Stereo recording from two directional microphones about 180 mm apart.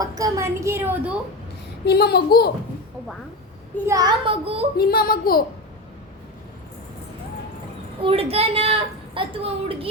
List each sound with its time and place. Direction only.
0.0 s a woman's voice: 20° right (ahead or behind)
1.8 s a child's voice: 65° left (ahead or behind)
3.8 s a child's voice: 20° right (ahead or behind)
4.8 s a child's voice: 55° left (ahead or behind)
8.0 s a woman's voice: 35° right (ahead or behind)